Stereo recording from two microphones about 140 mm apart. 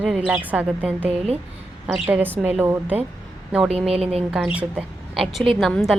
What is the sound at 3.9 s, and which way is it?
Speech, 45° right (ahead or behind).